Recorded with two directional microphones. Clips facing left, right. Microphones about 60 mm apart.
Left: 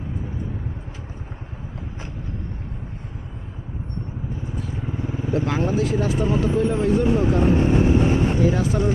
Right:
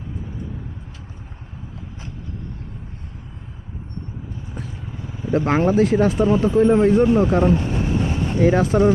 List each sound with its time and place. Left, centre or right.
4.8 s vehicle: left
5.3 s speech: right
7.5 s vehicle: left
8.4 s speech: right